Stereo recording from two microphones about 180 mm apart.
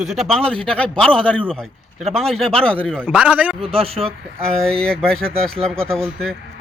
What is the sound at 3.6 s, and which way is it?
Speech, 30° right (ahead or behind).